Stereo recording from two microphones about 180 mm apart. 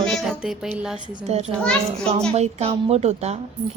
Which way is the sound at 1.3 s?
35° right (ahead or behind).